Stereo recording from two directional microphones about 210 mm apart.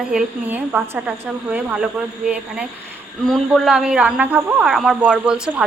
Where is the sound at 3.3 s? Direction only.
Centre (ahead or behind).